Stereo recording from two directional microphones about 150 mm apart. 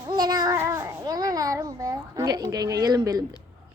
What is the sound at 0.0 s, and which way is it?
Child singing, 30° right (ahead or behind).